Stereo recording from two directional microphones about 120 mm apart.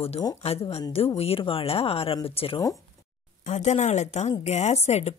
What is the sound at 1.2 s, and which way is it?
Speech, 50° left (ahead or behind).